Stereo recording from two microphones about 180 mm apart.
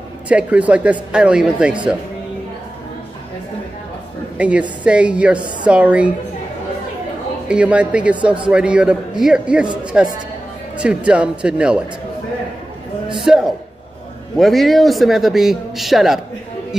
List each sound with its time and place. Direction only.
0.3 s speech: 5° right (ahead or behind)
4.4 s speech: 5° right (ahead or behind)
7.4 s a man's voice: 5° right (ahead or behind)
13.1 s a man's voice: centre (ahead or behind)